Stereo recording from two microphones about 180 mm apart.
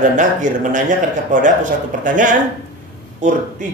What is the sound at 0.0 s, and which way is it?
Speech, 45° right (ahead or behind).